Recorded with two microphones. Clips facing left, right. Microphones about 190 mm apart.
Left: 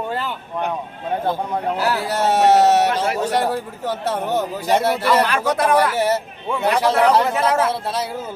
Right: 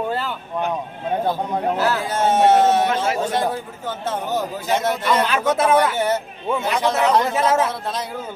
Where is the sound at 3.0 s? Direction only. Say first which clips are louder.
Left 1 dB; 35° left (ahead or behind).